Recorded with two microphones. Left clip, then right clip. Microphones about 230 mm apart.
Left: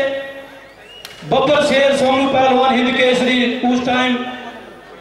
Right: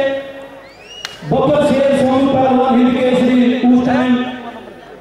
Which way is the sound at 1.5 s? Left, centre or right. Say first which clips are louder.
Right 1 dB; centre.